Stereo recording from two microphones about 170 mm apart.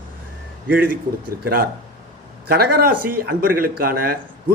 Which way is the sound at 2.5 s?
65° right (ahead or behind).